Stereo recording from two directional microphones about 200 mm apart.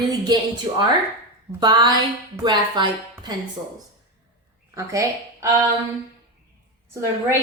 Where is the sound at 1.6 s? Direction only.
20° right (ahead or behind).